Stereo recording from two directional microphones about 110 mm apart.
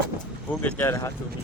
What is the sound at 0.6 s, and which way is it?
Speech, 15° left (ahead or behind).